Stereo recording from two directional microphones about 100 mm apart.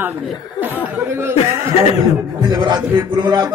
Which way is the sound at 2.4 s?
50° right (ahead or behind).